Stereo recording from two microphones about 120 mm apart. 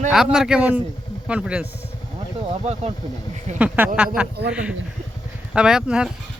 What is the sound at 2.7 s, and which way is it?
Speech, 65° right (ahead or behind).